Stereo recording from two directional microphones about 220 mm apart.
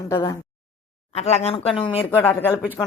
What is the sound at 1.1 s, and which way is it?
Speech, 30° left (ahead or behind).